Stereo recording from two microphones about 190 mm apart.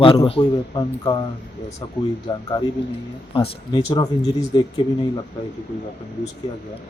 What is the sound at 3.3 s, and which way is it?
Speech, 25° left (ahead or behind).